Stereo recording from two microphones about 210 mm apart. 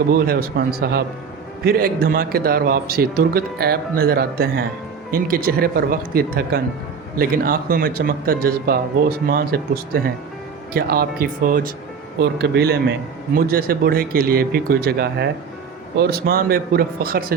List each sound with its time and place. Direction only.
0.1 s a man's voice: 45° right (ahead or behind)